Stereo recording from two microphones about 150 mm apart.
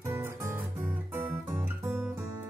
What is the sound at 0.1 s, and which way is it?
Music, 15° right (ahead or behind).